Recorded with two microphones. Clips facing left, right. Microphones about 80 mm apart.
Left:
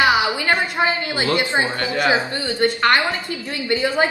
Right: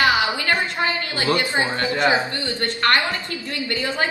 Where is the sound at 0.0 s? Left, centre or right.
Centre.